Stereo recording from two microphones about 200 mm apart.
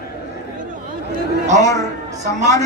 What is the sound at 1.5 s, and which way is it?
Speech, 15° left (ahead or behind).